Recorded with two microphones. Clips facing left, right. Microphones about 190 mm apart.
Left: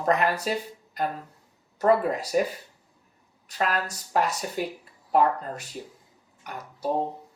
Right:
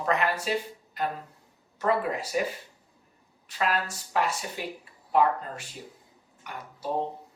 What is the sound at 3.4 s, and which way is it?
Speech, 40° left (ahead or behind).